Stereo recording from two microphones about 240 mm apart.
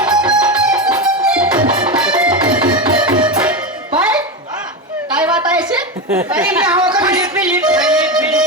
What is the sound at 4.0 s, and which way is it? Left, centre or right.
Music, centre.